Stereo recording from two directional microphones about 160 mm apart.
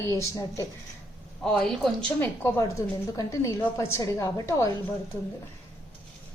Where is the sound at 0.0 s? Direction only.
20° left (ahead or behind).